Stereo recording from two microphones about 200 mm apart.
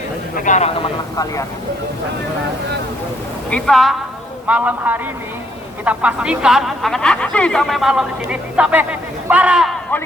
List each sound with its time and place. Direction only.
0.3 s speech: 40° left (ahead or behind)
0.8 s speech: 15° left (ahead or behind)
3.5 s a man's voice: centre (ahead or behind)